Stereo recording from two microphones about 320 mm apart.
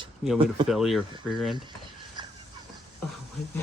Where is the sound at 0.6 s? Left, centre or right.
Centre.